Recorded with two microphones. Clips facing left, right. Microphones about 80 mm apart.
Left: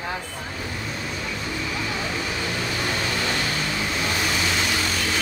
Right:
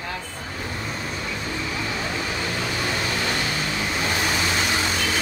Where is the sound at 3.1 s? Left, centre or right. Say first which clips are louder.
Even; centre.